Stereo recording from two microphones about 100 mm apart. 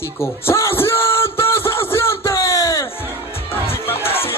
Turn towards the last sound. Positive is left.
turn(degrees=25)  # may be behind; listen again after turning